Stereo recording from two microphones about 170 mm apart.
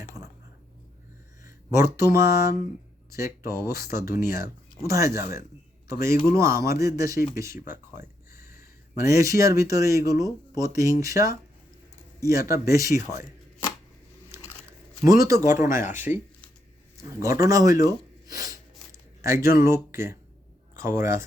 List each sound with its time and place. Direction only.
1.5 s speech: 15° right (ahead or behind)
14.3 s crumpling: 15° right (ahead or behind)
15.0 s speech: 20° right (ahead or behind)